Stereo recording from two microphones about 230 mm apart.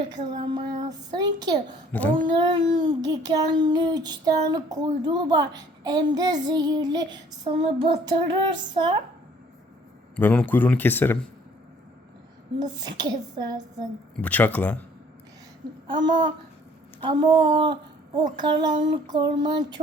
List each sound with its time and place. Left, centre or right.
0.1 s a woman's voice: centre
1.9 s a sound: centre
2.2 s child singing: centre
10.2 s speech: centre
12.5 s child singing: centre
14.2 s speech: centre
15.9 s child singing: centre
17.0 s speech: right
18.3 s child singing: centre